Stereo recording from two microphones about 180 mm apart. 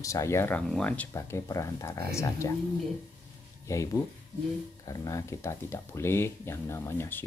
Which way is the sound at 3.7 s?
15° left (ahead or behind).